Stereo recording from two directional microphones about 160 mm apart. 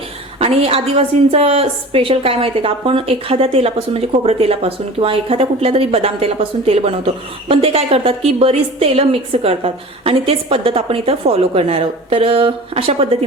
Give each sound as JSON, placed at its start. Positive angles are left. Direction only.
{"t": 0.3, "sound": "a woman's voice", "side_deg": -35}